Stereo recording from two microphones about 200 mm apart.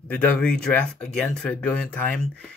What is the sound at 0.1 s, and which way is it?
Speech, 5° left (ahead or behind).